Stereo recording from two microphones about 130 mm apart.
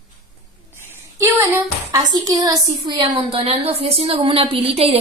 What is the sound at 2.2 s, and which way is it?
A woman's voice, 30° right (ahead or behind).